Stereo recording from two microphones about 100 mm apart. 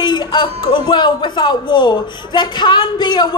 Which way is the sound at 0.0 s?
50° left (ahead or behind).